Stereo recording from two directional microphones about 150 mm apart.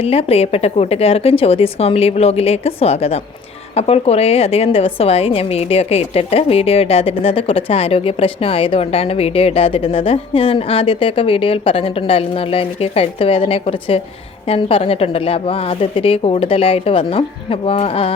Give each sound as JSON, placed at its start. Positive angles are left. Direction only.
{"t": 0.0, "sound": "a woman's voice", "side_deg": 40}